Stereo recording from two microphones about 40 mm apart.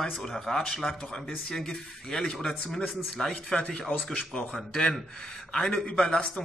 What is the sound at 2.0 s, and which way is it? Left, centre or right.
Speech, left.